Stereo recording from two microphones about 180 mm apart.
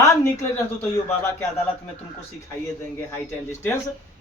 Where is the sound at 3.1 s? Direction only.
15° left (ahead or behind).